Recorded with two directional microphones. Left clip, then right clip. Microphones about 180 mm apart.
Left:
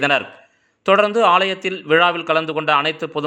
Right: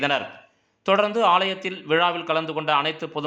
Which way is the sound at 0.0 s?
25° left (ahead or behind).